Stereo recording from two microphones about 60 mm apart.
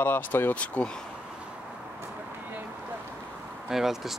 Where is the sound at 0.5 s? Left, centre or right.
Left.